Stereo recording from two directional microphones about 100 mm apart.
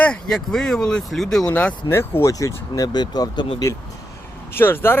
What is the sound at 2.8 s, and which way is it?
Speech, 45° left (ahead or behind).